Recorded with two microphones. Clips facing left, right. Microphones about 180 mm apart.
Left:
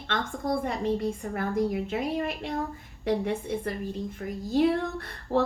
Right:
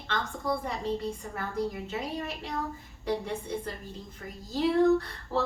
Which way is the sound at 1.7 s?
55° left (ahead or behind).